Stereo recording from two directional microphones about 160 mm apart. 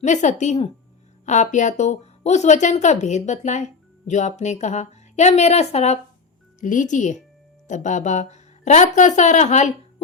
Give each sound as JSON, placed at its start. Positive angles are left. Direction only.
{"t": 0.0, "sound": "speech", "side_deg": 50}
{"t": 6.6, "sound": "speech", "side_deg": 55}